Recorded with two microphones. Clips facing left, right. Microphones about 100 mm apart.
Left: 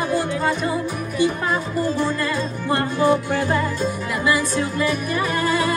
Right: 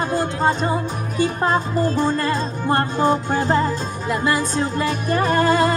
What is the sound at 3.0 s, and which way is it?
Music, 25° right (ahead or behind).